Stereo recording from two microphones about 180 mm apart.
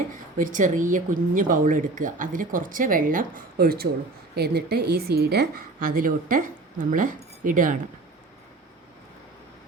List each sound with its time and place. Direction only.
0.1 s a woman's voice: 45° right (ahead or behind)